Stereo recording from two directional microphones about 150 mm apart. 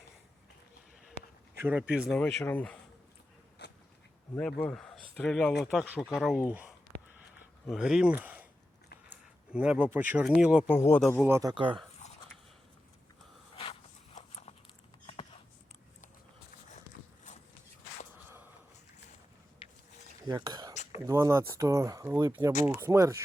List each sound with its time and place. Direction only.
1.6 s speech: 10° right (ahead or behind)
2.4 s speech: 10° left (ahead or behind)
3.6 s a sound: 90° left
4.6 s speech: 5° left (ahead or behind)
5.7 s speech: 10° right (ahead or behind)
8.1 s a sound: 10° right (ahead or behind)
9.5 s speech: 5° right (ahead or behind)
10.7 s speech: 15° left (ahead or behind)
11.3 s speech: 20° right (ahead or behind)
11.5 s speech: 35° right (ahead or behind)
14.2 s a sound: 45° left (ahead or behind)
19.6 s wild animals: 35° left (ahead or behind)
20.2 s whispering: 25° right (ahead or behind)
21.1 s speech: 15° right (ahead or behind)